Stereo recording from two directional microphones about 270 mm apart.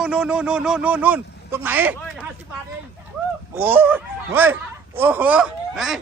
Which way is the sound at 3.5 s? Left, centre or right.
Centre.